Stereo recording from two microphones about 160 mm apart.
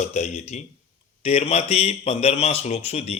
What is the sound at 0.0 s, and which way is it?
Speech, 45° left (ahead or behind).